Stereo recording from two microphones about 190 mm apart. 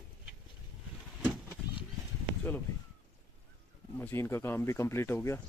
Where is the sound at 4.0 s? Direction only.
10° left (ahead or behind).